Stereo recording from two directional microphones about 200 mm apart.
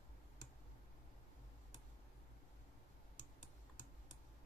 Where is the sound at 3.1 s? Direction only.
40° left (ahead or behind).